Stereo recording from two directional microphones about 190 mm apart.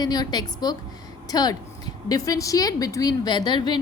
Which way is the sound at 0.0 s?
20° left (ahead or behind).